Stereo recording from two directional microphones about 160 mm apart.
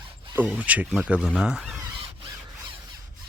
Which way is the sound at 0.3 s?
10° right (ahead or behind).